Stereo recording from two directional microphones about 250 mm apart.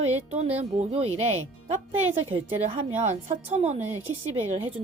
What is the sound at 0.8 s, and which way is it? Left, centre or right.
Speech, right.